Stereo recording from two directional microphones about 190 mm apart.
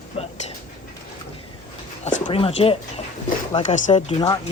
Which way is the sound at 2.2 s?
30° left (ahead or behind).